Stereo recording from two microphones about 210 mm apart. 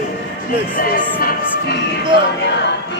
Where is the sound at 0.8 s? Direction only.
40° left (ahead or behind).